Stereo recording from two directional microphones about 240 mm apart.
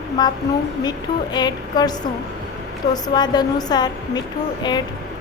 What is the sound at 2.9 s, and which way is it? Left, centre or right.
Speech, centre.